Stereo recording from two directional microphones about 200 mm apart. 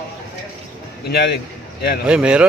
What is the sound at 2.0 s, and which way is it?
Speech, 5° right (ahead or behind).